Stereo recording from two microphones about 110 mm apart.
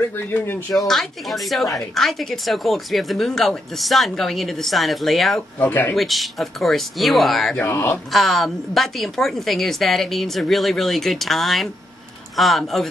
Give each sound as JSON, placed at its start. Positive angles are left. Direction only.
{"t": 0.1, "sound": "speech", "side_deg": 20}
{"t": 0.7, "sound": "a woman's voice", "side_deg": 0}
{"t": 5.6, "sound": "speech", "side_deg": 15}
{"t": 5.9, "sound": "a woman's voice", "side_deg": 0}
{"t": 7.5, "sound": "speech", "side_deg": 20}
{"t": 8.1, "sound": "a woman's voice", "side_deg": 0}